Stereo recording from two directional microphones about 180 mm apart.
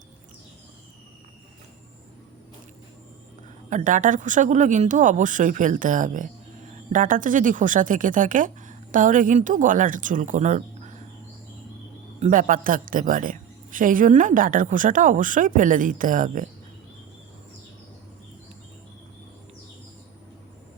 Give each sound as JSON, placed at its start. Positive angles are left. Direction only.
{"t": 3.7, "sound": "speech", "side_deg": -45}
{"t": 12.2, "sound": "speech", "side_deg": -50}